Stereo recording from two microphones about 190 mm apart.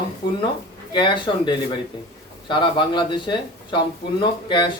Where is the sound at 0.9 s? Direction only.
25° left (ahead or behind).